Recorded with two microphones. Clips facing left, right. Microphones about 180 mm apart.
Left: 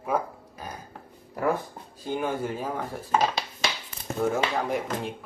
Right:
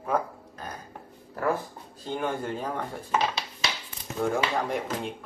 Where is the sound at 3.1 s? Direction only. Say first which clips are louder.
Left 3 dB; 50° left (ahead or behind).